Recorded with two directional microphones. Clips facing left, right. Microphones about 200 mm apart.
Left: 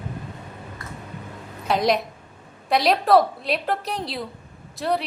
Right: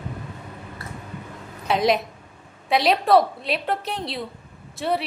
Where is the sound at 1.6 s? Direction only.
Centre (ahead or behind).